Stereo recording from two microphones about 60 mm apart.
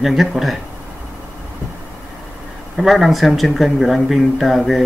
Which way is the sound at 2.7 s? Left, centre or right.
Centre.